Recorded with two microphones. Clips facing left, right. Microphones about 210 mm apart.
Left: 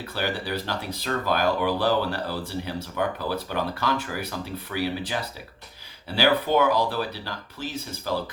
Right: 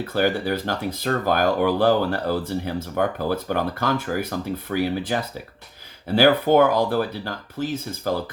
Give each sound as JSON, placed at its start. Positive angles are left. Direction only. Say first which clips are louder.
{"t": 0.1, "sound": "speech", "louder": "right 7 dB", "side_deg": -50}